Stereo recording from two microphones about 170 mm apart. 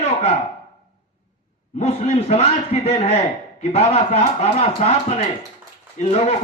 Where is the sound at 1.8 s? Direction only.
40° left (ahead or behind).